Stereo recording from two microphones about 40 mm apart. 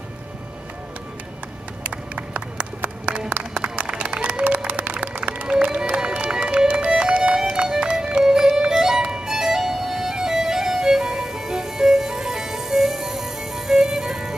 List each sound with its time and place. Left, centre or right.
1.8 s clapping: right
3.5 s run: right
4.7 s music: right
5.1 s music: right
5.5 s music: right
8.2 s music: centre